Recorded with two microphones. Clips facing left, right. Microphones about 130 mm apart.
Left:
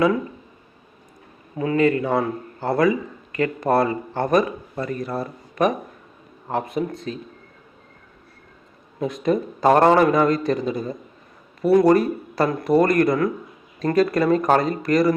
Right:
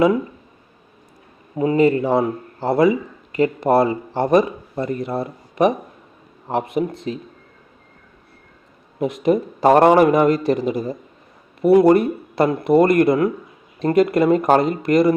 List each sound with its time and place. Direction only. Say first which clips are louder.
1.5 s a man's voice: right 3 dB; 25° right (ahead or behind)
9.0 s speech: right 3 dB; 25° right (ahead or behind)